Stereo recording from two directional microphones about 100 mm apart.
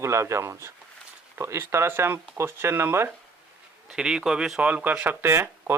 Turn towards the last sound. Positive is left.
turn(degrees=-25)  # may be behind; listen again after turning